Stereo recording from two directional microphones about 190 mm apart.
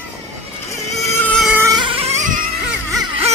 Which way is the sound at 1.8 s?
30° right (ahead or behind).